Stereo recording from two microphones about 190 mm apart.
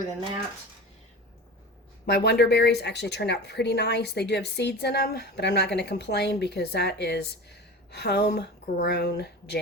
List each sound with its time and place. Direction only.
2.0 s speech: 60° left (ahead or behind)